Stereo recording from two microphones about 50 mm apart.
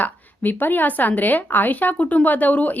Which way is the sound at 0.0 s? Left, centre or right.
Left.